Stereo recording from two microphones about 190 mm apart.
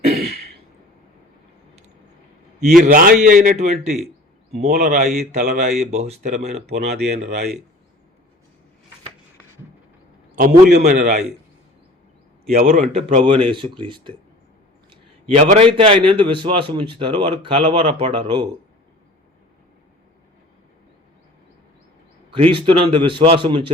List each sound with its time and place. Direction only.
2.8 s a man's voice: 45° right (ahead or behind)
6.7 s speech: 60° right (ahead or behind)
10.3 s a man's voice: 50° right (ahead or behind)
12.5 s a man's voice: 45° right (ahead or behind)
12.9 s a man's voice: 35° right (ahead or behind)
22.4 s a man's voice: 30° right (ahead or behind)